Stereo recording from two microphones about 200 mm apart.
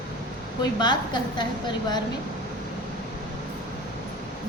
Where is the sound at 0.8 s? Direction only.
25° left (ahead or behind).